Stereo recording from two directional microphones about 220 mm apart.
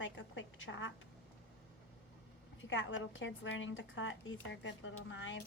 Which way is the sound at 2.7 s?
60° left (ahead or behind).